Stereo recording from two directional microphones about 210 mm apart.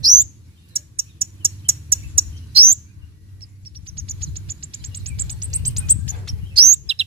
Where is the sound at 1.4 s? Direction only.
25° right (ahead or behind).